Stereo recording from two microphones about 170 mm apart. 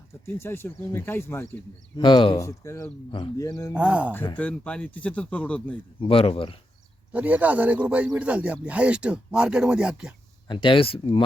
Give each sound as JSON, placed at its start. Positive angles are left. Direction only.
{"t": 0.3, "sound": "speech", "side_deg": 15}
{"t": 2.0, "sound": "speech", "side_deg": 30}
{"t": 2.4, "sound": "speech", "side_deg": 20}
{"t": 3.1, "sound": "speech", "side_deg": 30}
{"t": 3.3, "sound": "speech", "side_deg": 20}
{"t": 3.8, "sound": "speech", "side_deg": -5}
{"t": 4.4, "sound": "speech", "side_deg": 5}
{"t": 6.0, "sound": "speech", "side_deg": 35}
{"t": 7.1, "sound": "speech", "side_deg": -10}
{"t": 10.5, "sound": "speech", "side_deg": 30}